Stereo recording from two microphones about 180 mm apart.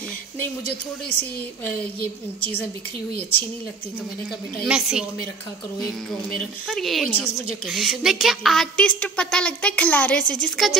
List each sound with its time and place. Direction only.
4.6 s speech: 5° right (ahead or behind)
6.7 s speech: centre (ahead or behind)